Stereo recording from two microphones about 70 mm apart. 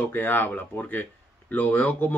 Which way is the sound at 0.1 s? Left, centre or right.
Left.